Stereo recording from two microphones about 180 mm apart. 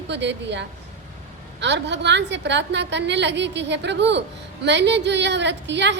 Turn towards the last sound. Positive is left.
turn(degrees=-75)  # may be behind; listen again after turning